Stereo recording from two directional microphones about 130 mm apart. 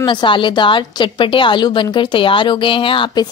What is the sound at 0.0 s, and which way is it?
A woman's voice, 40° left (ahead or behind).